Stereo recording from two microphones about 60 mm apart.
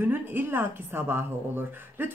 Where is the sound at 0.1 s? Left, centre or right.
Right.